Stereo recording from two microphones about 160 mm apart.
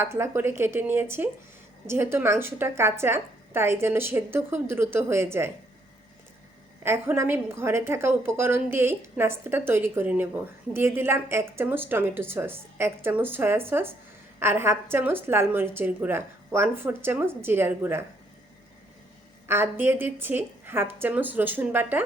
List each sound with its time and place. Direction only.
0.0 s a woman's voice: 15° right (ahead or behind)
6.8 s a woman's voice: 15° right (ahead or behind)
19.5 s a woman's voice: 15° right (ahead or behind)